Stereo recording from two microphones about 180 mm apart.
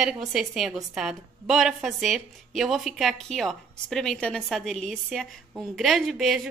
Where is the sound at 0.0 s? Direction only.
Centre (ahead or behind).